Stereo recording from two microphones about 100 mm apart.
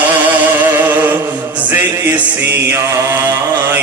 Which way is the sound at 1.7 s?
20° right (ahead or behind).